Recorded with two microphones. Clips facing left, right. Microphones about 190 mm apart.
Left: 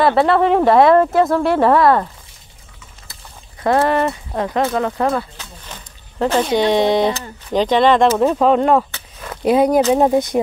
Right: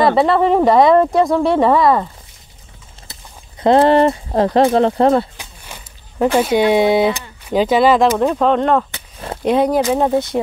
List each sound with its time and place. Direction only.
0.0 s speech: centre (ahead or behind)
3.6 s speech: 30° right (ahead or behind)
5.4 s a sound: 10° right (ahead or behind)
7.2 s speech: 10° right (ahead or behind); by 10.4 s 15° left (ahead or behind)